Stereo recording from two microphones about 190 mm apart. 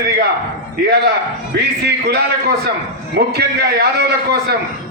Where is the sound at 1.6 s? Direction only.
60° right (ahead or behind).